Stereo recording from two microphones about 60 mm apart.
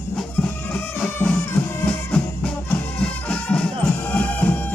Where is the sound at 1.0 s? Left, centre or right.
Centre.